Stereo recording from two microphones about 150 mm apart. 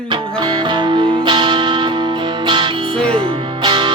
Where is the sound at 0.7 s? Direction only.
30° right (ahead or behind).